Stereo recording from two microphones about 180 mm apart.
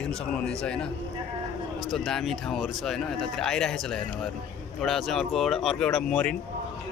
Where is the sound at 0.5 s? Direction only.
5° left (ahead or behind).